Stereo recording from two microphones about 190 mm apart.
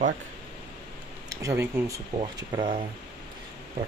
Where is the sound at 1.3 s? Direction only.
15° right (ahead or behind).